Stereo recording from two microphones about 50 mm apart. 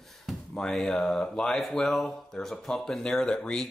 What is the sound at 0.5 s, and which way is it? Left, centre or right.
Speech, centre.